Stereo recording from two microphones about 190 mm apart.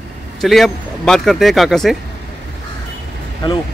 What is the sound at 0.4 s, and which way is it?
A man's voice, centre (ahead or behind).